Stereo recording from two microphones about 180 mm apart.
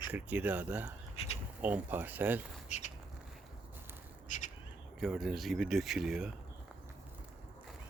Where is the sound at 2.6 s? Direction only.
40° left (ahead or behind).